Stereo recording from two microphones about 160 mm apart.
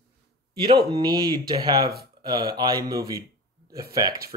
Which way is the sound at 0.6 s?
30° right (ahead or behind).